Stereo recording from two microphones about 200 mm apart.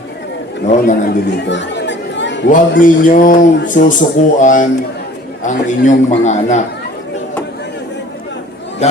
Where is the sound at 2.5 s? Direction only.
40° left (ahead or behind).